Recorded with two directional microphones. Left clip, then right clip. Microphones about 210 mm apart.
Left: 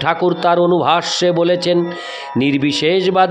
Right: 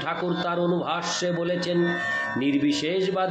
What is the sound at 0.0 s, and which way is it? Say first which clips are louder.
A man's voice: left 12 dB; 55° left (ahead or behind).